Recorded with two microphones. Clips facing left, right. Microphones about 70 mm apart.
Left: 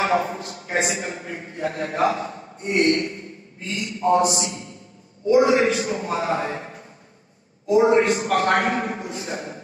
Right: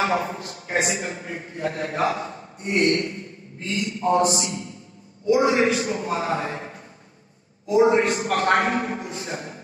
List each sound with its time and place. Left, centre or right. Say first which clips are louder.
0.0 s a man's voice: left 2 dB; left
3.7 s a man's voice: right 2 dB; right
4.4 s a man's voice: even; left
7.6 s a man's voice: left 1 dB; left